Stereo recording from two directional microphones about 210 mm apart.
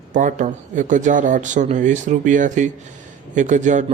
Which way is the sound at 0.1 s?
40° right (ahead or behind).